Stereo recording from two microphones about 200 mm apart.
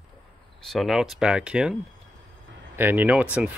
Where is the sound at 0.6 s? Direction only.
Centre (ahead or behind).